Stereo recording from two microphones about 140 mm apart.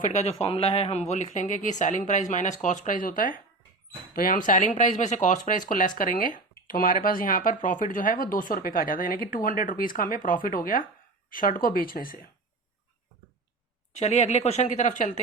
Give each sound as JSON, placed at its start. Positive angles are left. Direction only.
{"t": 0.4, "sound": "speech", "side_deg": 45}
{"t": 4.1, "sound": "speech", "side_deg": 90}
{"t": 6.7, "sound": "speech", "side_deg": 90}
{"t": 13.9, "sound": "speech", "side_deg": 55}